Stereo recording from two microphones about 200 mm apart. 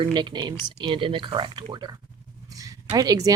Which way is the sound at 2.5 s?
15° right (ahead or behind).